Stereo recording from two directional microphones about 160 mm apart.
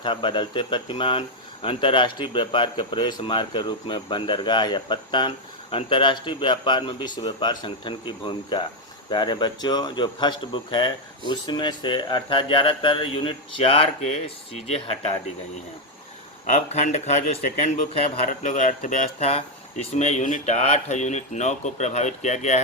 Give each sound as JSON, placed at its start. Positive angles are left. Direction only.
{"t": 0.0, "sound": "speech", "side_deg": 30}
{"t": 16.6, "sound": "speech", "side_deg": 45}